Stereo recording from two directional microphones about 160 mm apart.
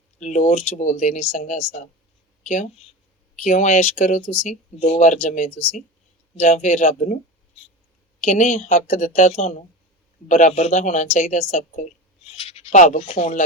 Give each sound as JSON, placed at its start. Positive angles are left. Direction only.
{"t": 0.2, "sound": "a woman's voice", "side_deg": 50}
{"t": 8.2, "sound": "a woman's voice", "side_deg": 50}